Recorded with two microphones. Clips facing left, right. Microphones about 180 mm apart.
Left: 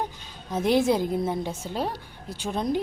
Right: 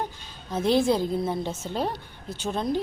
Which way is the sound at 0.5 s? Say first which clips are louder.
Even; 15° left (ahead or behind).